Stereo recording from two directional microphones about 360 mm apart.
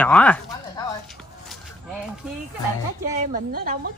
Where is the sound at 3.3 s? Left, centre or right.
Right.